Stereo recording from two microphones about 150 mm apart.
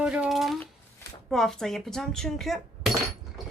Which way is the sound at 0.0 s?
5° right (ahead or behind).